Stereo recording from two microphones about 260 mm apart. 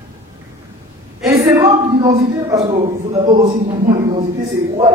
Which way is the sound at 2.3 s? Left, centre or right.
Centre.